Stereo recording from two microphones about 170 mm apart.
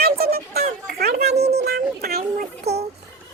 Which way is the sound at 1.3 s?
70° right (ahead or behind).